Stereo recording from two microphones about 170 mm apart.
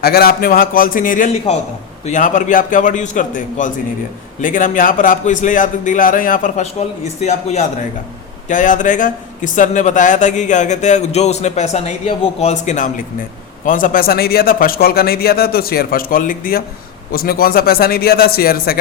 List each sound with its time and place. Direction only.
0.0 s a man's voice: 65° left (ahead or behind)